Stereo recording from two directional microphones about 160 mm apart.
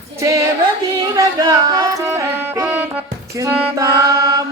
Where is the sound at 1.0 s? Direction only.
20° right (ahead or behind).